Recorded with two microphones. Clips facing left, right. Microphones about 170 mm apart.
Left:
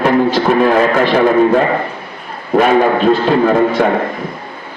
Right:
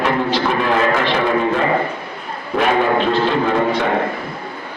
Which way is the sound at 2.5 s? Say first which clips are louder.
Left 5 dB; 45° left (ahead or behind).